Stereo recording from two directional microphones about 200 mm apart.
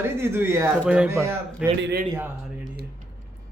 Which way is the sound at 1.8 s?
55° right (ahead or behind).